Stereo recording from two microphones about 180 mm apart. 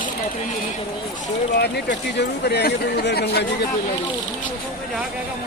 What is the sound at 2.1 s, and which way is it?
Speech, 65° left (ahead or behind).